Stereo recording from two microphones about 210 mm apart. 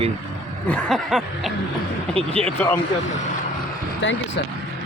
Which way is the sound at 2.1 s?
25° right (ahead or behind).